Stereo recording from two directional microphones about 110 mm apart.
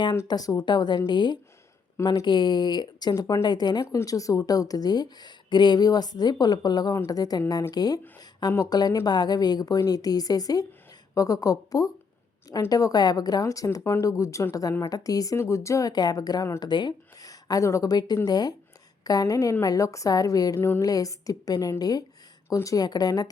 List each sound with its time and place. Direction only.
0.3 s speech: 35° left (ahead or behind)
20.6 s speech: 20° left (ahead or behind)
20.8 s speech: 35° left (ahead or behind)